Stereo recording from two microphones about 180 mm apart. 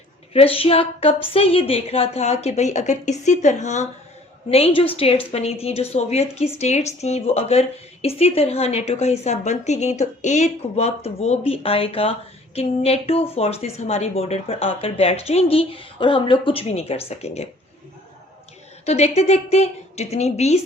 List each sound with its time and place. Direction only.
0.3 s a woman's voice: 30° left (ahead or behind)
18.9 s a woman's voice: 35° left (ahead or behind)